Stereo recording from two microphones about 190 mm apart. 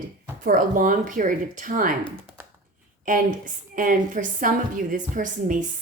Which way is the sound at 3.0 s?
45° right (ahead or behind).